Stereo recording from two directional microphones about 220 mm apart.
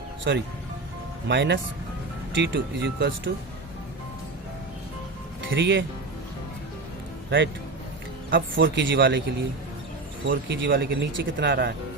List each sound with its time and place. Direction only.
0.3 s speech: 50° right (ahead or behind)
5.5 s speech: 55° right (ahead or behind)
7.3 s a man's voice: 55° right (ahead or behind)
8.5 s speech: 55° right (ahead or behind)
10.2 s speech: 55° right (ahead or behind)